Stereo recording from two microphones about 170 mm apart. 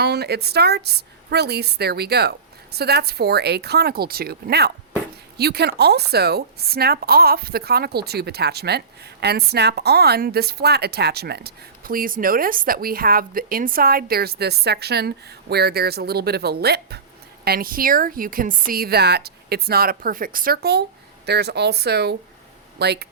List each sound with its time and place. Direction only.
0.0 s a woman's voice: 70° right (ahead or behind)